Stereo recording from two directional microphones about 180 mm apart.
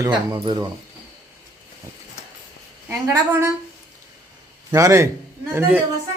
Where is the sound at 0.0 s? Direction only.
20° right (ahead or behind).